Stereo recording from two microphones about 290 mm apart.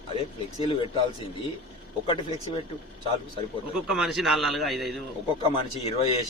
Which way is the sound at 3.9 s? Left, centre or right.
Centre.